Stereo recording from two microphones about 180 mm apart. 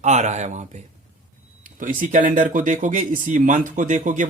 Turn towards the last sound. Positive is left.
turn(degrees=-45)  # may be behind; listen again after turning